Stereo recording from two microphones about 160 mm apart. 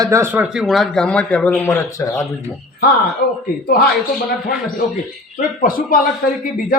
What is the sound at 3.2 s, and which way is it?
Speech, 70° left (ahead or behind).